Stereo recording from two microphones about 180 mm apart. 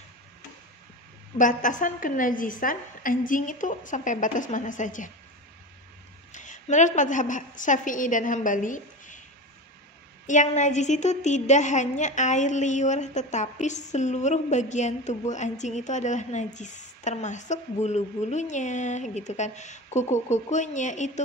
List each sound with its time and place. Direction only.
1.4 s a woman's voice: 45° left (ahead or behind)
6.3 s a woman's voice: 45° left (ahead or behind)
10.2 s a woman's voice: 45° left (ahead or behind)